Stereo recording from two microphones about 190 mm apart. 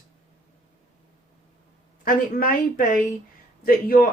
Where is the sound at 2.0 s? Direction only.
45° left (ahead or behind).